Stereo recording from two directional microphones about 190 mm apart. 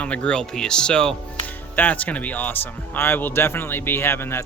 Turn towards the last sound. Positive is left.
turn(degrees=15)  # may be behind; listen again after turning